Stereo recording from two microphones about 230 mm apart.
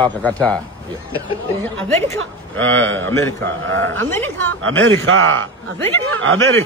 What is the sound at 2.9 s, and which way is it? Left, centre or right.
Speech, centre.